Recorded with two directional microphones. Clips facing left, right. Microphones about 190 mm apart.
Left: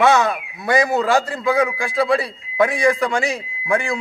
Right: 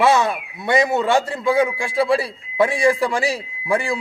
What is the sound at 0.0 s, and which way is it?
A man's voice, 30° right (ahead or behind).